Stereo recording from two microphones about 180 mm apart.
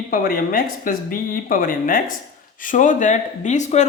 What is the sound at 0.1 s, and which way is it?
Speech, 50° left (ahead or behind).